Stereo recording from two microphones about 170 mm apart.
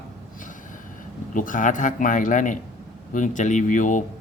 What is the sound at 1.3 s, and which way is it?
Speech, 50° left (ahead or behind).